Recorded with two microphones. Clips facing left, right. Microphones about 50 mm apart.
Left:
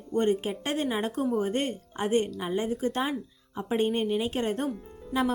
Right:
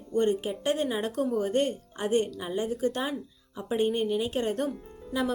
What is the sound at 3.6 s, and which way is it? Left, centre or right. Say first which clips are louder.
A woman's voice: even; left.